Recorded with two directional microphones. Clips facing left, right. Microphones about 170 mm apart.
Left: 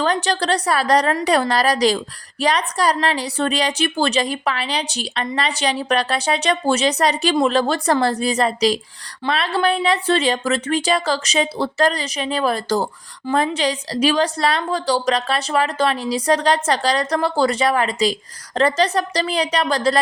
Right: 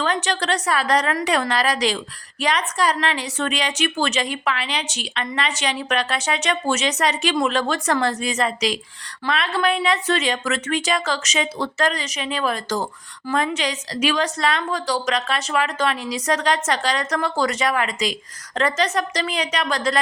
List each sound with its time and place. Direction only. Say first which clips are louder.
0.0 s speech: left 3 dB; 35° left (ahead or behind)